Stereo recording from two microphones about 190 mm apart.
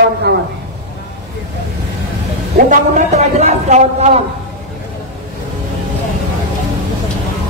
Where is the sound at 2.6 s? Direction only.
45° right (ahead or behind).